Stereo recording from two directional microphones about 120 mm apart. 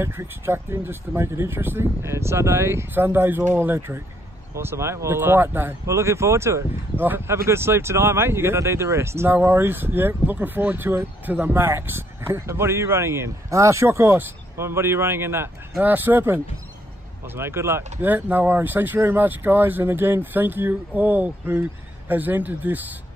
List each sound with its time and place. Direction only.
0.0 s speech: 20° right (ahead or behind)
17.4 s speech: 20° right (ahead or behind)